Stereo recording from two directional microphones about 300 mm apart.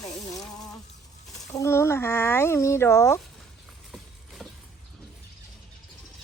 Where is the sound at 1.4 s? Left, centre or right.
Centre.